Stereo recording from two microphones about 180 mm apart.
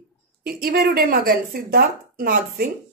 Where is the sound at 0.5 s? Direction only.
55° right (ahead or behind).